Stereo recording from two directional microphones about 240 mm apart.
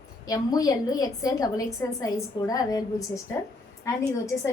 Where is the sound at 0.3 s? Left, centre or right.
Centre.